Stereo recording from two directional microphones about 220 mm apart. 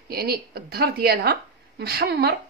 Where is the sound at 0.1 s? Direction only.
45° right (ahead or behind).